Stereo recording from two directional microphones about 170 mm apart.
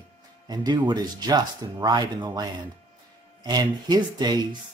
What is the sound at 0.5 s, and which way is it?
Speech, 25° right (ahead or behind).